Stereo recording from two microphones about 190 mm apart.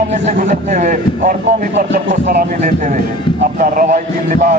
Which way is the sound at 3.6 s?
45° right (ahead or behind).